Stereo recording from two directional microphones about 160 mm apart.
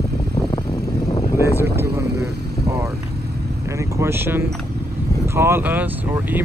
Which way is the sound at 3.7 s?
20° right (ahead or behind).